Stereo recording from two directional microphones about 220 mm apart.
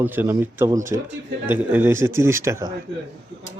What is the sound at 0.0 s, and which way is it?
A man's voice, 10° right (ahead or behind).